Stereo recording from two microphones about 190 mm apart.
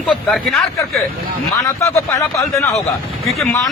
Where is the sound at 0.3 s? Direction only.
Centre (ahead or behind).